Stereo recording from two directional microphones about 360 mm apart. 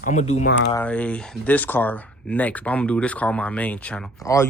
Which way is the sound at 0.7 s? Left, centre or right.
Centre.